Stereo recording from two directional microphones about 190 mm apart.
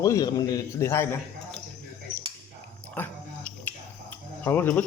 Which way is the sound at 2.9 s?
10° left (ahead or behind).